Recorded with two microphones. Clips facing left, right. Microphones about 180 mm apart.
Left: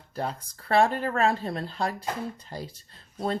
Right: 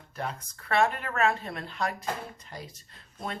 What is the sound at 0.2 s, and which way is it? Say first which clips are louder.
Speech: left 4 dB; 30° left (ahead or behind).